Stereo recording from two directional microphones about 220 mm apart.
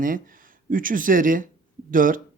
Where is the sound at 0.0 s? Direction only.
40° right (ahead or behind).